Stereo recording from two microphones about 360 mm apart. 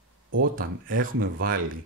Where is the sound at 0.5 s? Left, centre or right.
Right.